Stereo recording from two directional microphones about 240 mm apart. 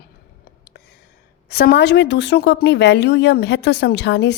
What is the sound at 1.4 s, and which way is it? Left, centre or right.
A woman's voice, left.